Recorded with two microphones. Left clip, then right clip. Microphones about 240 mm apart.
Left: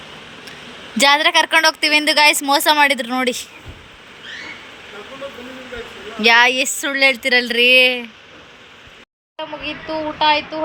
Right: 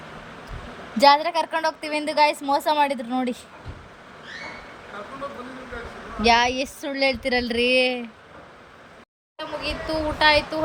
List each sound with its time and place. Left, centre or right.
1.0 s a woman's voice: left
6.2 s a woman's voice: centre
9.6 s a woman's voice: centre